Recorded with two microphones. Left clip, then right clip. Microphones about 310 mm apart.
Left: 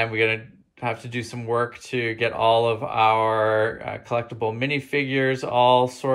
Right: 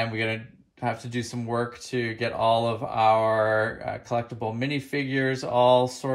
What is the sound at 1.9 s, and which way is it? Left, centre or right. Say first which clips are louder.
Speech: left 4 dB; right.